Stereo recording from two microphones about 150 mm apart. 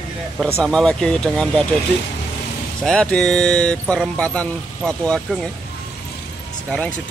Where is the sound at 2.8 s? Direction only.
5° left (ahead or behind).